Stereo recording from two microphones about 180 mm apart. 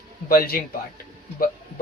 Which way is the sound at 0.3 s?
55° left (ahead or behind).